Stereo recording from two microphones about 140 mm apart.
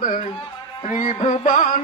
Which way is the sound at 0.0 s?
65° left (ahead or behind).